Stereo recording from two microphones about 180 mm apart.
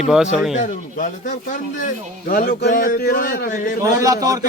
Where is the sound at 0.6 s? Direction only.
45° left (ahead or behind).